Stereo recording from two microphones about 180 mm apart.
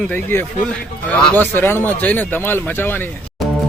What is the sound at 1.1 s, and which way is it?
Speech, 10° left (ahead or behind).